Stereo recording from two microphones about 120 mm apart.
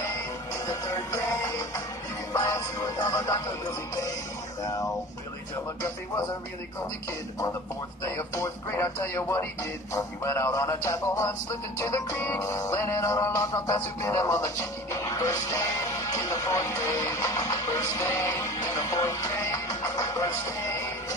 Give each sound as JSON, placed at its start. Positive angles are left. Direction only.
{"t": 0.9, "sound": "music", "side_deg": 25}
{"t": 4.6, "sound": "music", "side_deg": 30}
{"t": 8.0, "sound": "music", "side_deg": 25}